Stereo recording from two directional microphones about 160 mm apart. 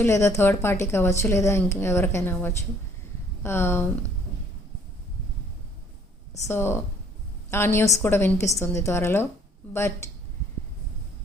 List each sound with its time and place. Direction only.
0.0 s a woman's voice: 15° left (ahead or behind)
6.5 s a woman's voice: 15° left (ahead or behind)